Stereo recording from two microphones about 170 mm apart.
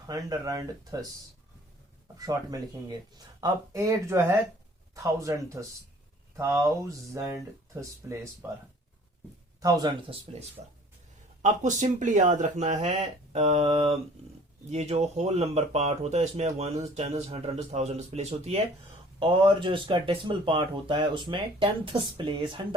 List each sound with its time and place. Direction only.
0.1 s speech: 20° right (ahead or behind)
2.1 s speech: 20° right (ahead or behind)
9.6 s speech: 20° right (ahead or behind)
10.6 s speech: 35° right (ahead or behind)